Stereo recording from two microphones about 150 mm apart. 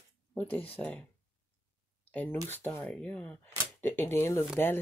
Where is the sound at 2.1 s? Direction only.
10° left (ahead or behind).